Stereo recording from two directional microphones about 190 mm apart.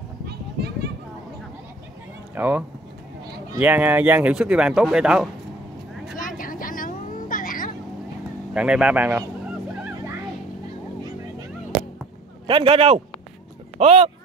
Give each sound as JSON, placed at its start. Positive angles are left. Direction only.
{"t": 0.3, "sound": "children playing", "side_deg": -55}
{"t": 2.3, "sound": "speech", "side_deg": -10}
{"t": 6.1, "sound": "vehicle", "side_deg": 45}
{"t": 8.5, "sound": "speech", "side_deg": -5}
{"t": 12.4, "sound": "a man's voice", "side_deg": -30}